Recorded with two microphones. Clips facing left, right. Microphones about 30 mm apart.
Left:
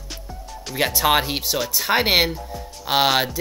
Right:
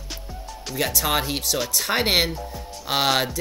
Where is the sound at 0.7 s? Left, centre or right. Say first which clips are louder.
Left 4 dB; left.